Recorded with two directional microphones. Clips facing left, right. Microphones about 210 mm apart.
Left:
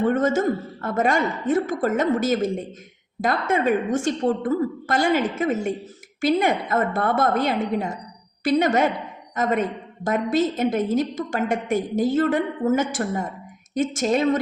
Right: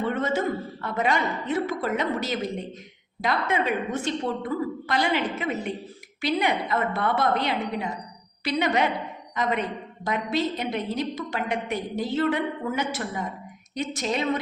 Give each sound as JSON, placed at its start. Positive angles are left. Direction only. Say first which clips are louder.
{"t": 0.0, "sound": "a woman's voice", "louder": "left 6 dB", "side_deg": 45}